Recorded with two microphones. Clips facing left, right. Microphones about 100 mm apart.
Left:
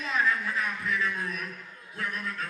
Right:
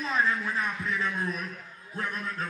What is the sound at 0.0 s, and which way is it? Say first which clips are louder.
A man's voice: right 1 dB; 35° right (ahead or behind).